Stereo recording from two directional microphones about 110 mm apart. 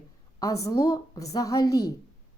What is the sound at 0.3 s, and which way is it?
A woman's voice, 30° left (ahead or behind).